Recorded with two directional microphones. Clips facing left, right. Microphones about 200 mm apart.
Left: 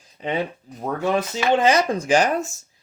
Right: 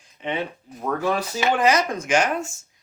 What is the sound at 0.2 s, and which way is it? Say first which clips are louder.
Speech: left 2 dB; 35° left (ahead or behind).